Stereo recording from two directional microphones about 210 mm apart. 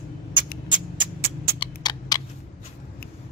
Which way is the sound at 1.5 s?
20° left (ahead or behind).